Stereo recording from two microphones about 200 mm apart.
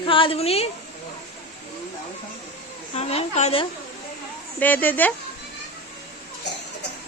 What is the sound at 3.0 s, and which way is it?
Speech, 30° left (ahead or behind).